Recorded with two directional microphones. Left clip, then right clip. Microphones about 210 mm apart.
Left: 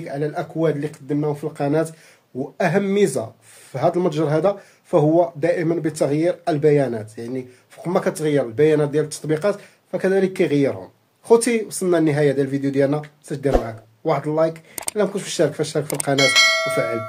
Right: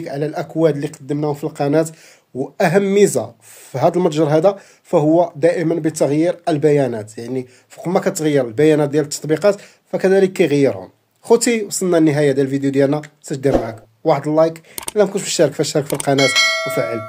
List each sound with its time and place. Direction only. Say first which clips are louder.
0.0 s speech: right 3 dB; 45° right (ahead or behind)
16.2 s bell: left 1 dB; centre (ahead or behind)